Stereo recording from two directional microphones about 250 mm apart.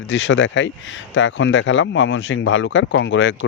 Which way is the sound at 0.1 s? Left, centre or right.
Left.